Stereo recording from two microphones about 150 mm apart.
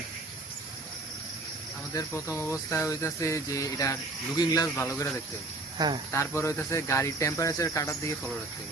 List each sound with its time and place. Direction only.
1.9 s speech: 20° left (ahead or behind)
5.7 s speech: 30° right (ahead or behind)
6.1 s speech: 20° left (ahead or behind)